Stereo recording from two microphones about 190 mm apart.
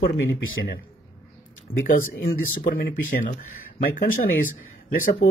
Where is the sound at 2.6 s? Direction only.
45° left (ahead or behind).